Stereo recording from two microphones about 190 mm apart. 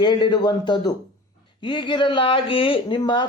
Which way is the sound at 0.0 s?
25° left (ahead or behind).